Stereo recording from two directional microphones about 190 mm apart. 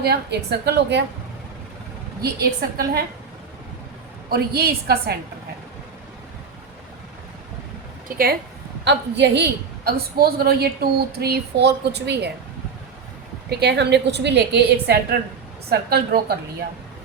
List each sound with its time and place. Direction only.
0.0 s a woman's voice: 60° right (ahead or behind)
2.2 s a woman's voice: 55° right (ahead or behind)
4.3 s a woman's voice: 60° right (ahead or behind)
8.8 s a woman's voice: 65° right (ahead or behind)
13.5 s a woman's voice: 60° right (ahead or behind)